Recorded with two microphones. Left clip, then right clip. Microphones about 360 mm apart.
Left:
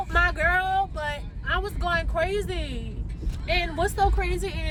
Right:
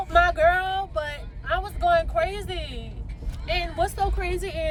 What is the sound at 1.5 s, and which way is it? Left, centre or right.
Vehicle, right.